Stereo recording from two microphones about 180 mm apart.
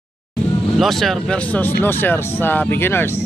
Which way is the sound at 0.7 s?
Centre (ahead or behind).